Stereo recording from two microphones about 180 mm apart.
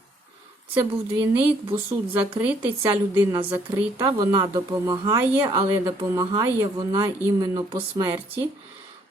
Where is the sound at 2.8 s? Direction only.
20° right (ahead or behind).